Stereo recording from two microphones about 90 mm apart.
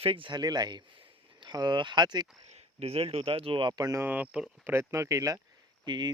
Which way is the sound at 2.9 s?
90° right.